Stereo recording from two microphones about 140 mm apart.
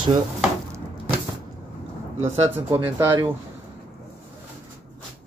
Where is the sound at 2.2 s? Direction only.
50° right (ahead or behind).